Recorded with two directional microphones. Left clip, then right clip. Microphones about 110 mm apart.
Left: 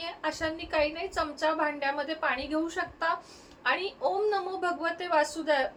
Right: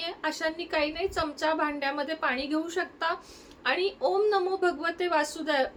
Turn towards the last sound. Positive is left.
turn(degrees=-40)  # may be behind; listen again after turning